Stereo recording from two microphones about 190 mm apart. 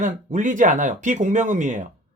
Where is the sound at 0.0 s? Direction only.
40° right (ahead or behind).